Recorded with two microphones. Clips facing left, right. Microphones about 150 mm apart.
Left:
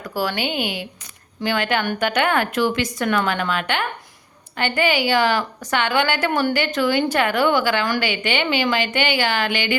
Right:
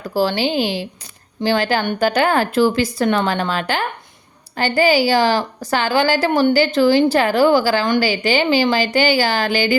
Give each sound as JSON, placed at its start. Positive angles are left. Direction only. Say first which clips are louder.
{"t": 0.1, "sound": "a woman's voice", "louder": "right 6 dB", "side_deg": -30}